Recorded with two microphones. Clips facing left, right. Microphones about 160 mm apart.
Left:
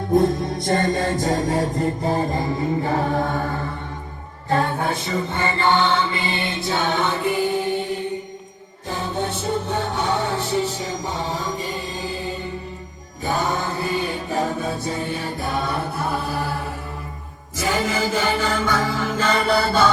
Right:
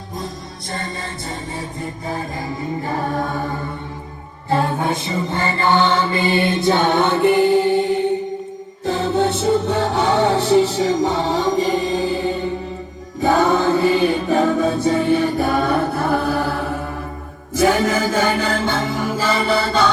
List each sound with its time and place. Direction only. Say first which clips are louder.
0.1 s music: left 13 dB; 55° left (ahead or behind)
1.4 s music: left 8 dB; 90° left
1.8 s mantra: left 5 dB; 35° left (ahead or behind)
6.1 s chant: right 8 dB; 45° right (ahead or behind); by 8.0 s 75° right (ahead or behind)
8.9 s music: right 7 dB; 90° right
13.2 s music: right 8 dB; 75° right (ahead or behind)
16.4 s mantra: right 5 dB; 65° right (ahead or behind)
17.6 s music: right 6 dB; 55° right (ahead or behind); by 19.9 s 5° left (ahead or behind)